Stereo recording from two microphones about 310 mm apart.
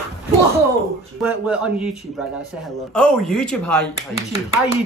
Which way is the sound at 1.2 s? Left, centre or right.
Centre.